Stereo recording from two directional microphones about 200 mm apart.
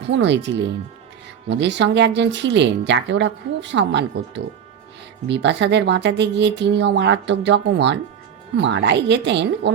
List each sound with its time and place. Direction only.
0.0 s speech: 60° right (ahead or behind)